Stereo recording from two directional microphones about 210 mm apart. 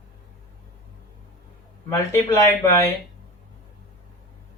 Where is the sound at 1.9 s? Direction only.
15° left (ahead or behind).